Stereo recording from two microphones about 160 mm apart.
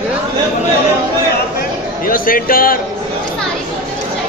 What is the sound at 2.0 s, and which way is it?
Speech, 60° left (ahead or behind).